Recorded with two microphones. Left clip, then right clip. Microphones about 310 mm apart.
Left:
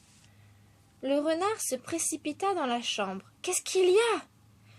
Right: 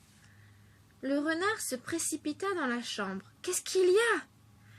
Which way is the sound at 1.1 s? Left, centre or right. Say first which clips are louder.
Left 3 dB; centre.